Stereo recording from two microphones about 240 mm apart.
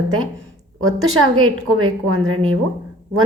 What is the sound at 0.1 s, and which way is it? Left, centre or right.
A woman's voice, right.